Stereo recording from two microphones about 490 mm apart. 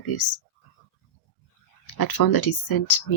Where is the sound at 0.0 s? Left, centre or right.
Left.